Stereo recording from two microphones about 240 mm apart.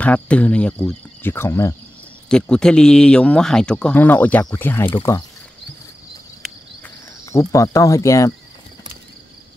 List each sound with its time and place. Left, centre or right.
0.0 s speech: centre
7.2 s speech: centre